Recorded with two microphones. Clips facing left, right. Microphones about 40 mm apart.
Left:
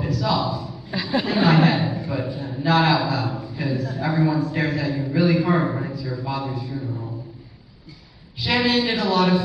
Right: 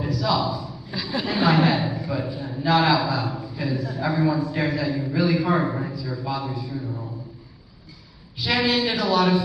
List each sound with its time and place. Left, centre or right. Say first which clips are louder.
0.2 s a sound: even; centre
0.9 s a woman's voice: left 5 dB; left
1.2 s a man's voice: left 1 dB; centre
3.3 s a sound: left 1 dB; centre
3.9 s a man's voice: left 1 dB; centre
8.4 s a man's voice: left 2 dB; centre